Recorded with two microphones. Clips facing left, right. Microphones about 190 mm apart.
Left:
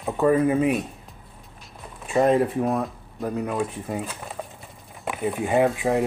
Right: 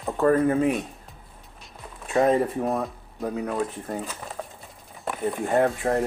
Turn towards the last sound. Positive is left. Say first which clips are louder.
# left 1 dB
turn(degrees=0)  # may be behind; listen again after turning